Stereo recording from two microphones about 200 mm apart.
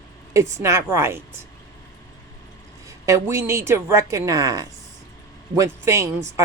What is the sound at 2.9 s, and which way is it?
Speech, 15° right (ahead or behind).